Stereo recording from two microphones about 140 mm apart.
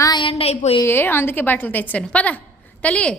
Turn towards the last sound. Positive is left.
turn(degrees=10)  # may be behind; listen again after turning